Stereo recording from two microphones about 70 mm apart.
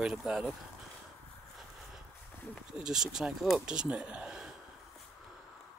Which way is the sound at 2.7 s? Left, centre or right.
Centre.